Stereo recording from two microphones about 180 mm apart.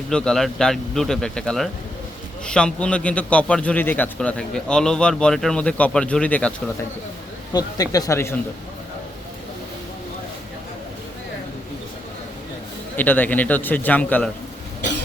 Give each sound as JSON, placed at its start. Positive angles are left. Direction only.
{"t": 0.1, "sound": "a man's voice", "side_deg": 5}
{"t": 7.5, "sound": "speech", "side_deg": 20}
{"t": 13.0, "sound": "a man's voice", "side_deg": 10}